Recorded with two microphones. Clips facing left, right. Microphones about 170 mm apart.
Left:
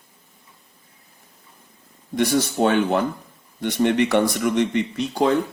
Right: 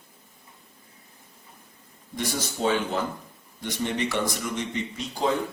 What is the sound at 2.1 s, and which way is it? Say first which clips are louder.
Speech: left 10 dB; 65° left (ahead or behind).